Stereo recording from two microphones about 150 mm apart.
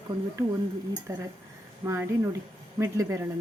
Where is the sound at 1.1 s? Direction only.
20° right (ahead or behind).